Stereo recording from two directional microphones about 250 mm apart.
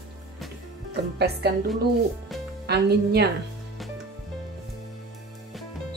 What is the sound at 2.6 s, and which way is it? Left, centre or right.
Speech, right.